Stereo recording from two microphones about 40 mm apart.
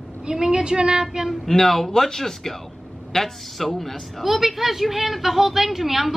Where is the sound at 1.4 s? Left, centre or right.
Centre.